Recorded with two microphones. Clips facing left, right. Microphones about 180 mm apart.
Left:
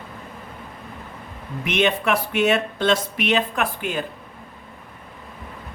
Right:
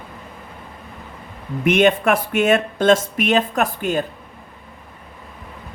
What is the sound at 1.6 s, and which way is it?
Speech, 50° right (ahead or behind).